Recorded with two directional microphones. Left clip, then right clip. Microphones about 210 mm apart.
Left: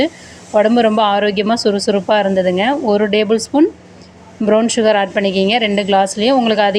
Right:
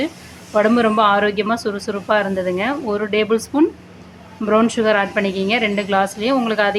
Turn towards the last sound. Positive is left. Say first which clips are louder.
# left 5 dB
turn(degrees=20)  # may be behind; listen again after turning